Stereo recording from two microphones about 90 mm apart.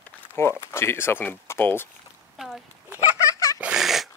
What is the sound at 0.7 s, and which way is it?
Speech, 25° left (ahead or behind).